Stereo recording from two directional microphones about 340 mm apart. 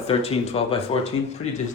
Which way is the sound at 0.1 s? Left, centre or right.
Centre.